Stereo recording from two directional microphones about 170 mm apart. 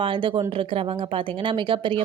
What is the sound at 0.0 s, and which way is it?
Speech, 30° right (ahead or behind).